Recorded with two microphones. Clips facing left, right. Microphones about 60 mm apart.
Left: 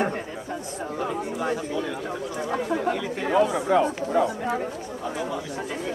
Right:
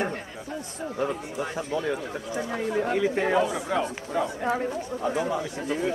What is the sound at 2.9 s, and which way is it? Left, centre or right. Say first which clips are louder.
Speech: right 2 dB; centre.